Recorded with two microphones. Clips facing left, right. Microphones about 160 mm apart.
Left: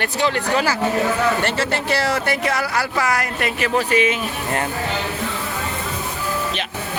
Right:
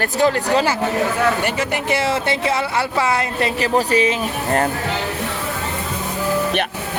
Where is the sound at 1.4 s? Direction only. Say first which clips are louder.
Right 1 dB; 15° right (ahead or behind); by 4.7 s 35° right (ahead or behind).